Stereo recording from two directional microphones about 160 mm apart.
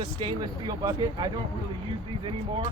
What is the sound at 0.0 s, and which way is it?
Speech, 30° right (ahead or behind).